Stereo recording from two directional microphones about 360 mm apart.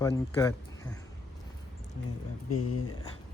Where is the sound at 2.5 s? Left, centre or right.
Left.